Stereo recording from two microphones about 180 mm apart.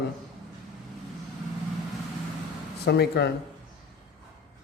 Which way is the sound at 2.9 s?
65° left (ahead or behind).